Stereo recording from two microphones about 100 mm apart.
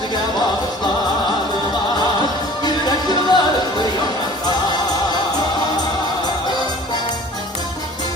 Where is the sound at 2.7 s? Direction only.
45° left (ahead or behind).